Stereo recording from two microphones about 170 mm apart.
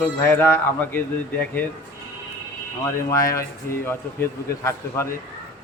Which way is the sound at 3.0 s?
15° left (ahead or behind).